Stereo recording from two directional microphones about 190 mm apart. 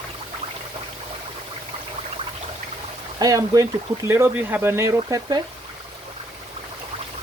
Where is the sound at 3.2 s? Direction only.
20° right (ahead or behind).